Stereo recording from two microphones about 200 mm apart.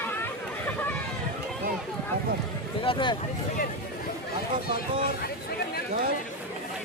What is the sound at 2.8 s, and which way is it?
Speech, 25° left (ahead or behind).